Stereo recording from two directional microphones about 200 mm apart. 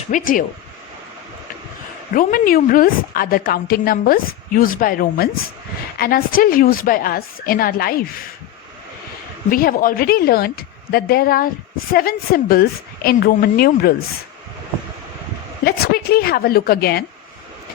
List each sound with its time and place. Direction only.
0.1 s a woman's voice: 45° left (ahead or behind)
2.1 s a woman's voice: 45° left (ahead or behind)
9.5 s a woman's voice: 45° left (ahead or behind)
15.6 s a woman's voice: 50° left (ahead or behind)